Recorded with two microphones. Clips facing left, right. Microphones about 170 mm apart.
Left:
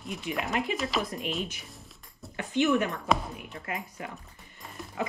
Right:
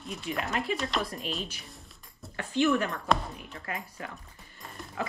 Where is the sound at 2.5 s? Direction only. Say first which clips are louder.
Left 1 dB; 15° left (ahead or behind).